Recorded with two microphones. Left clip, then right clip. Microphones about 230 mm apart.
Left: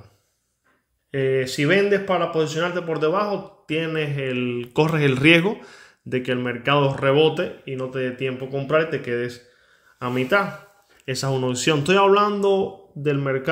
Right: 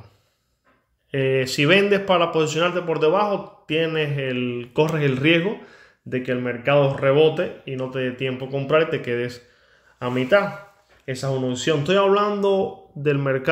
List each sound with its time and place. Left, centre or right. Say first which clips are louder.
1.1 s speech: right 1 dB; centre
9.9 s a man's voice: right 2 dB; centre
11.1 s a man's voice: left 1 dB; left; by 13.5 s centre